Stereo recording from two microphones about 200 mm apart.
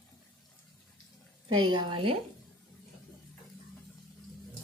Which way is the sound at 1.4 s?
25° right (ahead or behind).